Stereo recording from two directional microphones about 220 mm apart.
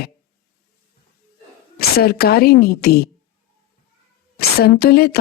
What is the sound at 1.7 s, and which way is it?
Speech, 45° left (ahead or behind).